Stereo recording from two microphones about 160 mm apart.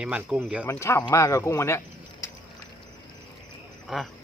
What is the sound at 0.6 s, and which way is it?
Speech, 15° left (ahead or behind).